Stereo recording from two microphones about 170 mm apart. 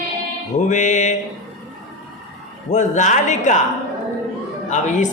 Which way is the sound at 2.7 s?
45° left (ahead or behind).